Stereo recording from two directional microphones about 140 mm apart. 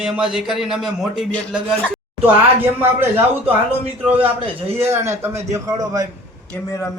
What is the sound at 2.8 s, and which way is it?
A man's voice, 15° right (ahead or behind).